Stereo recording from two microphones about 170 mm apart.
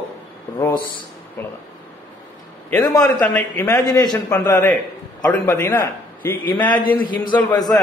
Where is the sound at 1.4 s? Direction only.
10° left (ahead or behind).